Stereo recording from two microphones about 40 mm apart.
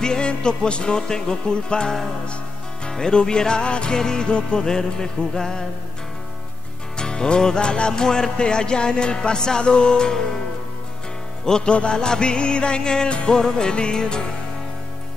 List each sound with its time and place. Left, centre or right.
0.0 s music: left
7.0 s music: left
11.4 s music: left